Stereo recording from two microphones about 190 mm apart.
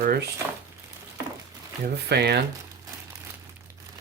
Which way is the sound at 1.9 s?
60° right (ahead or behind).